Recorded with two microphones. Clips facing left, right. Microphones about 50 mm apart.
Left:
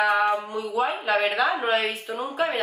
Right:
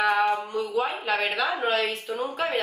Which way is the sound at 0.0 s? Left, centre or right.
Centre.